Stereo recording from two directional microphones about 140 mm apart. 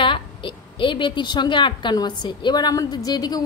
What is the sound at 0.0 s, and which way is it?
A woman's voice, 35° left (ahead or behind).